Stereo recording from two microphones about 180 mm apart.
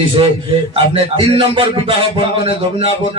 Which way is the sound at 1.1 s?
30° right (ahead or behind).